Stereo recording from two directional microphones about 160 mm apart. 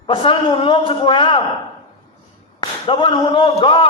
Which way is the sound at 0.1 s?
30° left (ahead or behind).